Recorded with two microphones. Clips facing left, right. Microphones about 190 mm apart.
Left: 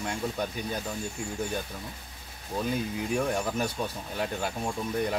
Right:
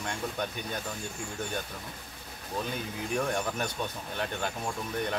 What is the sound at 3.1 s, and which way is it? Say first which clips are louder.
Speech: left 2 dB; 5° left (ahead or behind).